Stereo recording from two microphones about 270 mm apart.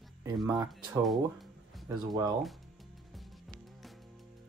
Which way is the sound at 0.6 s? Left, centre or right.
Centre.